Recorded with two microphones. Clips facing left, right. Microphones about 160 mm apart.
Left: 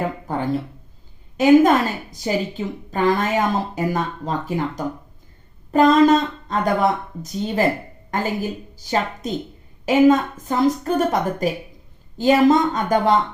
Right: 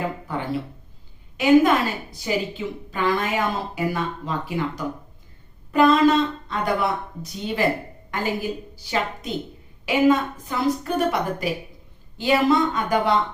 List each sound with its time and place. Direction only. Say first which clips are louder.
0.3 s a woman's voice: left 4 dB; 45° left (ahead or behind)